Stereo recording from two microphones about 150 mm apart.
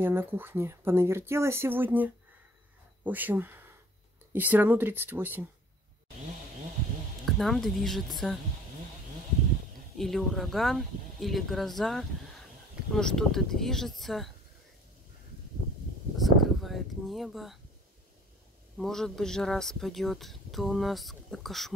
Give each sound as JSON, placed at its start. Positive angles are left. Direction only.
{"t": 0.0, "sound": "speech", "side_deg": -15}
{"t": 7.2, "sound": "speech", "side_deg": 0}
{"t": 9.9, "sound": "speech", "side_deg": 0}
{"t": 16.2, "sound": "a sound", "side_deg": 0}
{"t": 18.8, "sound": "speech", "side_deg": 5}